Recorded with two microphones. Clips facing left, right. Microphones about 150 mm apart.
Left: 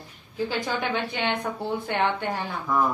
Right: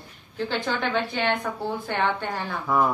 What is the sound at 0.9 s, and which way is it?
Speech, 20° left (ahead or behind).